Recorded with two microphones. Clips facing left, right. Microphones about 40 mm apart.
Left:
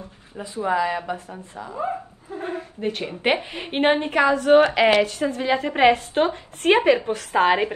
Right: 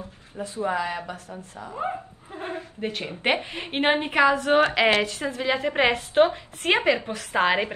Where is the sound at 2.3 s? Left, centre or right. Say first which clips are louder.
Left 3 dB; right.